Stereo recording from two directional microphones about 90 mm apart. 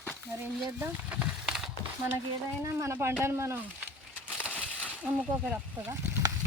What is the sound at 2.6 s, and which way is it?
Speech, 35° right (ahead or behind).